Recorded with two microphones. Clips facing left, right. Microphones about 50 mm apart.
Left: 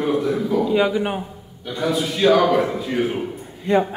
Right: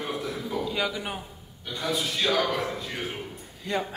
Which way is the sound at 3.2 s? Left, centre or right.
Left.